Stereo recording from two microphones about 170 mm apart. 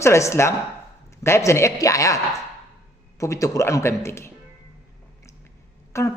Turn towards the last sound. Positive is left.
turn(degrees=15)  # may be behind; listen again after turning